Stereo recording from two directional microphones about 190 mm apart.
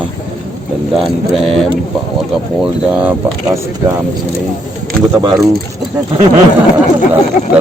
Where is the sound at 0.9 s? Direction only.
Centre (ahead or behind).